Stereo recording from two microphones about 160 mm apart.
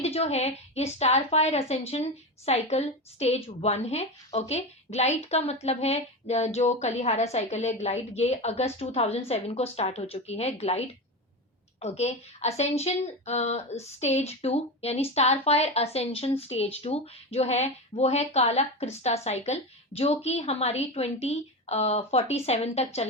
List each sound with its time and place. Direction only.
0.0 s a woman's voice: 40° left (ahead or behind)